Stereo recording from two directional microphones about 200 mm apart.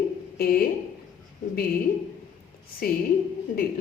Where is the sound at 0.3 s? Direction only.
50° left (ahead or behind).